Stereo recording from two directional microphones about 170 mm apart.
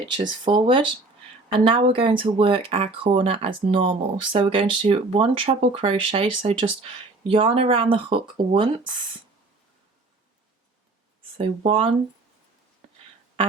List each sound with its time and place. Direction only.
0.0 s speech: 25° right (ahead or behind)
11.3 s speech: 30° right (ahead or behind)